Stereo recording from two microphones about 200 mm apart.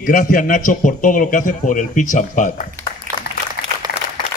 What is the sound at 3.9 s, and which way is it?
Applause, 45° left (ahead or behind).